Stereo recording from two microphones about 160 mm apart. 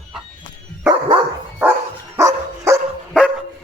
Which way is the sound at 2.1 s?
20° right (ahead or behind).